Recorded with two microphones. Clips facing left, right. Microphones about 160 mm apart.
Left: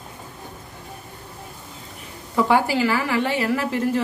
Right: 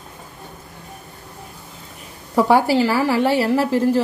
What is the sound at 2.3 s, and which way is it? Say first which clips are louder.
A woman's voice: right 4 dB; 35° right (ahead or behind).